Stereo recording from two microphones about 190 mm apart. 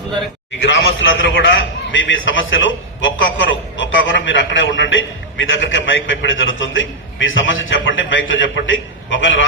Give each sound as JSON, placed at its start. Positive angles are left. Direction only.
{"t": 0.6, "sound": "a man's voice", "side_deg": 80}